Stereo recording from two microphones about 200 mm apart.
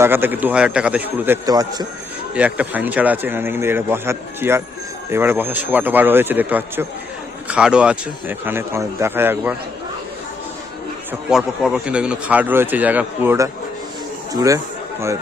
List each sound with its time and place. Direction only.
0.0 s speech: 10° right (ahead or behind)
2.3 s speech: 5° right (ahead or behind)
11.3 s speech: 5° right (ahead or behind)